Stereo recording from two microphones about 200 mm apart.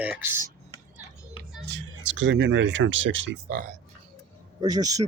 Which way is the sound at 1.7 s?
65° right (ahead or behind).